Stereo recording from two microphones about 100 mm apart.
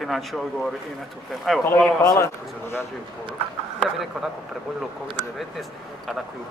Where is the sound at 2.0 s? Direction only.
30° left (ahead or behind).